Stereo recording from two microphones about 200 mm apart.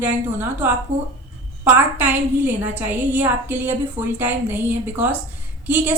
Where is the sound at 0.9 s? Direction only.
35° right (ahead or behind).